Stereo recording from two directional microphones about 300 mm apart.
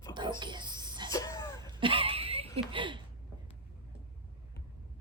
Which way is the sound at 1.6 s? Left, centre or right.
Centre.